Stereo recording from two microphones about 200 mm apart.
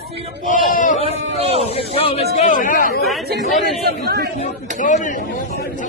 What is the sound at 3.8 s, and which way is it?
Speech, 50° right (ahead or behind).